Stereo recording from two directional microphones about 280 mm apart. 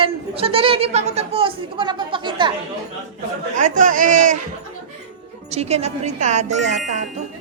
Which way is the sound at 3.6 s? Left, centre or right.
Right.